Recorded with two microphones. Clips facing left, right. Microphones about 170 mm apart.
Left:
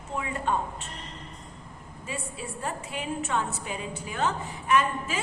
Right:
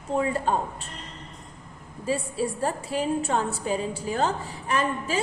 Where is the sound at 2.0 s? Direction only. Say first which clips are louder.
Right 10 dB; 35° right (ahead or behind).